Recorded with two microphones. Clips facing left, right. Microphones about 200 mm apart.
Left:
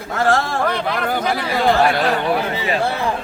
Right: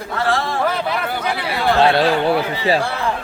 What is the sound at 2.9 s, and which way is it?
Speech, 20° left (ahead or behind).